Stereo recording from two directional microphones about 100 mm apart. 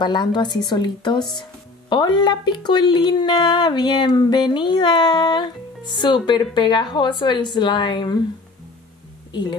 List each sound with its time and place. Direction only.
0.0 s speech: 50° left (ahead or behind)